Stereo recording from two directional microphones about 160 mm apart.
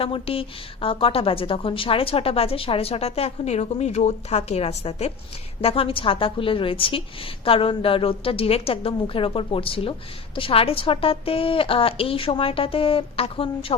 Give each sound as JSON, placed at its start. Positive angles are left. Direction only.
{"t": 0.0, "sound": "a woman's voice", "side_deg": 35}